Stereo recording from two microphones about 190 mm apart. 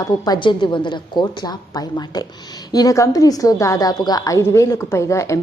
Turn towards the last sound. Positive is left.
turn(degrees=15)  # may be behind; listen again after turning